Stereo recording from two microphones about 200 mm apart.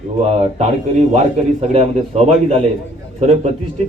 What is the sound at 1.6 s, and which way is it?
Speech, 35° right (ahead or behind).